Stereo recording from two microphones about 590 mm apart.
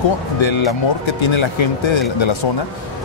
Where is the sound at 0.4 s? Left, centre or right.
Left.